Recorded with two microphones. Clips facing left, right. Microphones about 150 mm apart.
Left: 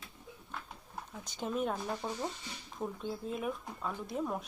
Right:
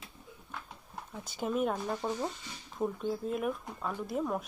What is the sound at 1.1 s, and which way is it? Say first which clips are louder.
Speech: right 3 dB; 5° right (ahead or behind).